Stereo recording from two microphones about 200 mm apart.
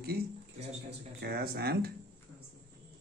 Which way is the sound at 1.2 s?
50° right (ahead or behind).